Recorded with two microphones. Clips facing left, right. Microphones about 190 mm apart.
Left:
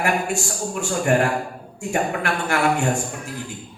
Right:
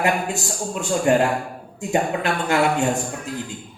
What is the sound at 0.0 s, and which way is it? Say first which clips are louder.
A man's voice: even; 20° right (ahead or behind).